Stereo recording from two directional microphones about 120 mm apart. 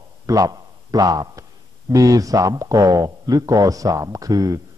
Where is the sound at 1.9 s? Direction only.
30° right (ahead or behind).